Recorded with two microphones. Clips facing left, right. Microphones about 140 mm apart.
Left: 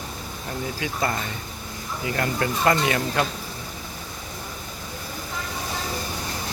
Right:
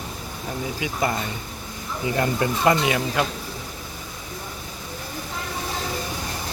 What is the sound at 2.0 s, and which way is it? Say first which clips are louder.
Speech: right 3 dB; 20° right (ahead or behind).